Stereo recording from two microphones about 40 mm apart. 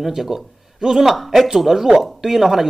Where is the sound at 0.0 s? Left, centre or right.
Centre.